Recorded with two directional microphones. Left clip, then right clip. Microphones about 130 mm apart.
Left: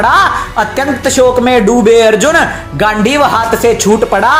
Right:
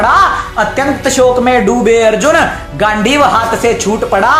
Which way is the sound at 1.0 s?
30° left (ahead or behind).